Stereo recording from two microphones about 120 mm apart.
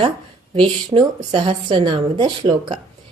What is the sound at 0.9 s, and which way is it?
Speech, 45° right (ahead or behind).